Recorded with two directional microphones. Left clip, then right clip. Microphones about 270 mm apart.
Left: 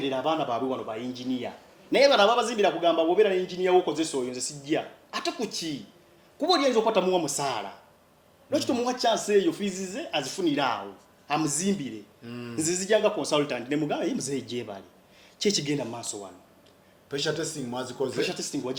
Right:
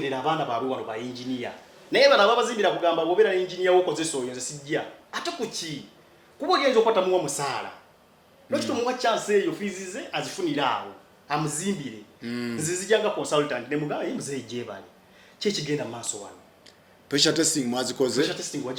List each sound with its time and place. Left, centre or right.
0.1 s a man's voice: left
17.2 s speech: right
18.2 s a man's voice: left